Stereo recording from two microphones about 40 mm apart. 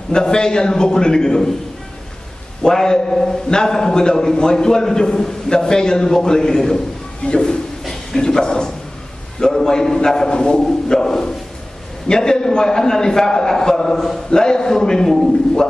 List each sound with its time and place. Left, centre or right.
0.1 s a man's voice: centre
2.6 s a man's voice: centre
7.8 s a sound: centre
8.2 s a man's voice: centre
14.3 s a man's voice: centre